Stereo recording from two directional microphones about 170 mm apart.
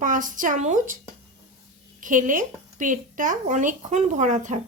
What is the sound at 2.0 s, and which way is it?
Speech, 50° right (ahead or behind).